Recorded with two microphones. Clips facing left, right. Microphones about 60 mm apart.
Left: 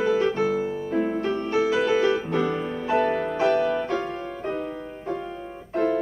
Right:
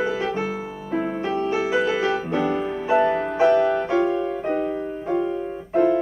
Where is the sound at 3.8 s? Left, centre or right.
Centre.